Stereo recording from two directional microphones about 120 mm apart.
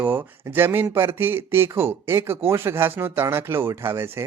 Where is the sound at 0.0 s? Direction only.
20° right (ahead or behind).